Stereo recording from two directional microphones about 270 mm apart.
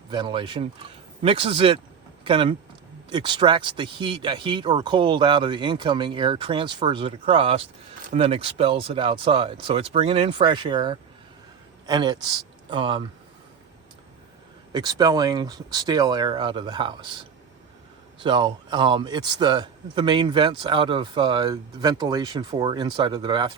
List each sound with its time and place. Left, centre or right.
0.1 s speech: centre
14.7 s speech: centre